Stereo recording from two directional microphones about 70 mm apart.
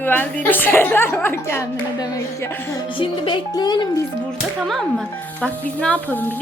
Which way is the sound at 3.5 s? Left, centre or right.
Left.